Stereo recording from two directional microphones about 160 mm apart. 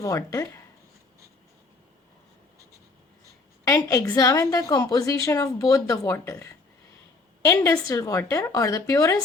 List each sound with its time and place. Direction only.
0.0 s a woman's voice: 20° left (ahead or behind)
3.6 s a woman's voice: 20° left (ahead or behind)